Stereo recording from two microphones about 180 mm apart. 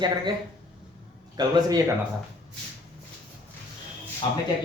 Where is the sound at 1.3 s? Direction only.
25° right (ahead or behind).